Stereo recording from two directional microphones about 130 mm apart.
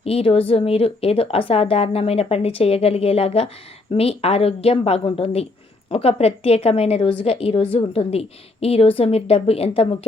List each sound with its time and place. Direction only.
0.0 s a woman's voice: 50° left (ahead or behind)